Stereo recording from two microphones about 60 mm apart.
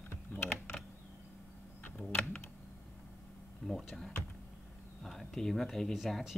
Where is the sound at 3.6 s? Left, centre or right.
Centre.